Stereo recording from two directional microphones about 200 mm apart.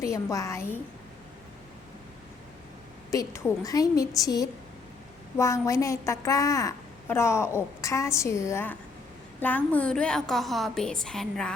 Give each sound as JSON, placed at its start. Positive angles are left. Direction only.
{"t": 0.0, "sound": "a woman's voice", "side_deg": 15}
{"t": 3.1, "sound": "a woman's voice", "side_deg": 15}